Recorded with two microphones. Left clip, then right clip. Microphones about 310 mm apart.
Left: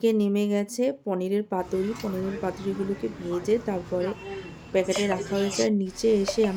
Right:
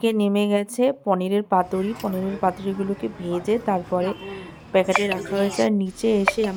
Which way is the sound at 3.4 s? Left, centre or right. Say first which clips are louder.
Right 4 dB; centre.